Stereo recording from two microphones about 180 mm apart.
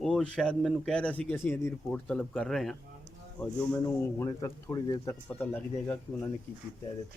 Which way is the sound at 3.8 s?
15° left (ahead or behind).